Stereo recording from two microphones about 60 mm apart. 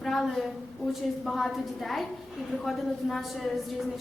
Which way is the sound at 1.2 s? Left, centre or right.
Centre.